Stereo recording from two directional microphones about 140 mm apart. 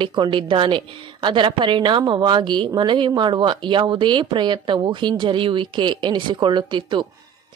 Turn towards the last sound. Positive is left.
turn(degrees=-35)  # may be behind; listen again after turning